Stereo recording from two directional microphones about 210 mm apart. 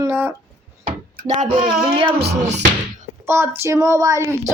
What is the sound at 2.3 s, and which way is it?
Music, 30° right (ahead or behind).